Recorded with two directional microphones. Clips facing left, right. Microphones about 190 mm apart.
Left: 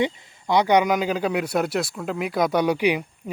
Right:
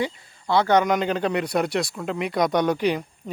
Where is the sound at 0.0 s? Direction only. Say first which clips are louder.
Left 3 dB; 15° left (ahead or behind).